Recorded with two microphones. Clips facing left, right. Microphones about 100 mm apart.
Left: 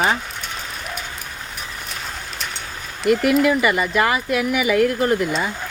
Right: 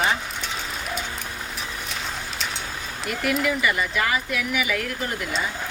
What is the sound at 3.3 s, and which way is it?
Speech, 45° left (ahead or behind).